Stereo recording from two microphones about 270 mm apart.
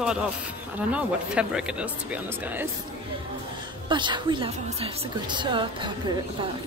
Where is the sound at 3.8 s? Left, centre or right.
Centre.